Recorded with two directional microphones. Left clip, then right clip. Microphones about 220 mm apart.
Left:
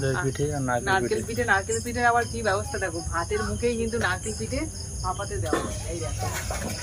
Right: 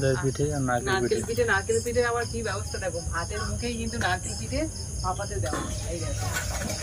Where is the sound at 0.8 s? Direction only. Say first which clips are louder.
Left 1 dB; 15° left (ahead or behind).